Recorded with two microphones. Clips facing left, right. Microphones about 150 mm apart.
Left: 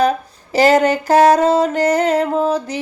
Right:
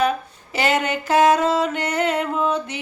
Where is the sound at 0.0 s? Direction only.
40° left (ahead or behind).